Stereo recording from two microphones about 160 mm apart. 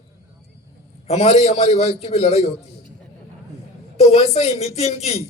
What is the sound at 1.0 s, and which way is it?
A man's voice, 40° left (ahead or behind).